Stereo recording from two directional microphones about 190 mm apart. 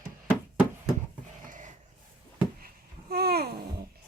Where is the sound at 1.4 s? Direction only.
45° right (ahead or behind).